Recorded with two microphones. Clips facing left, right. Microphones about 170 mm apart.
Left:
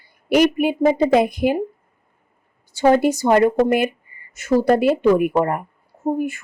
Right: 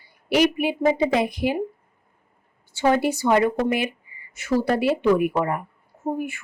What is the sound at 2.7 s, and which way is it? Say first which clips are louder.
A woman's voice: left 5 dB; 45° left (ahead or behind).